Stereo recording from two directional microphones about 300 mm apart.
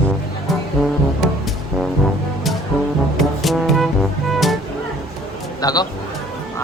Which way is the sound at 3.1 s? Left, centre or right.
Centre.